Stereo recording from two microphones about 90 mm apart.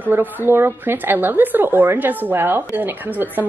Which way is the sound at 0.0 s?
20° right (ahead or behind).